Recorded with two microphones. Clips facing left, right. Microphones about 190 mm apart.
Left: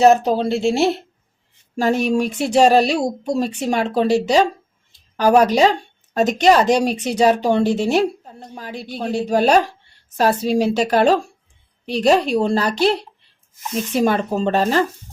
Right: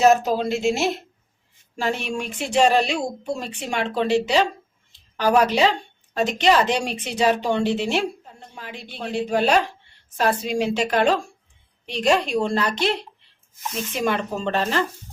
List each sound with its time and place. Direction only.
0.0 s speech: 35° left (ahead or behind)
13.6 s a woman's voice: centre (ahead or behind)
13.9 s speech: 35° left (ahead or behind)